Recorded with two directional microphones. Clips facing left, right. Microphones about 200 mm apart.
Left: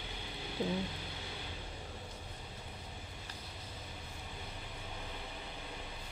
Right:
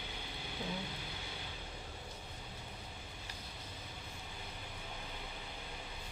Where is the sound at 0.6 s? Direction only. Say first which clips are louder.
Left 7 dB; 30° left (ahead or behind).